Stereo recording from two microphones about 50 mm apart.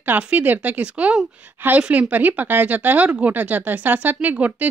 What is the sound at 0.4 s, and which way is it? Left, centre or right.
Speech, right.